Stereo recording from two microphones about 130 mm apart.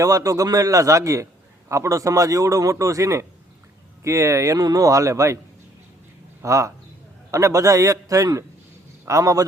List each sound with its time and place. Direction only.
0.0 s a man's voice: 25° right (ahead or behind)
6.4 s a man's voice: 25° right (ahead or behind)